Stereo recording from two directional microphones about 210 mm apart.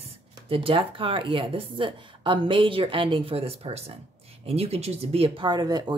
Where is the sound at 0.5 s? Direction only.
25° right (ahead or behind).